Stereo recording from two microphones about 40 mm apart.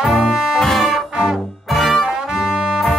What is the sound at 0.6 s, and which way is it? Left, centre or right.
Organ, centre.